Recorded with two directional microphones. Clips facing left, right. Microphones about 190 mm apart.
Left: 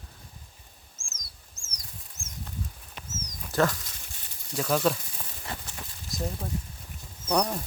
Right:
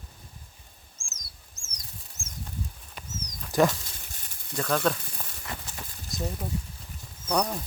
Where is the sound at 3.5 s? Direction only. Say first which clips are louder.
Right 3 dB; 15° right (ahead or behind).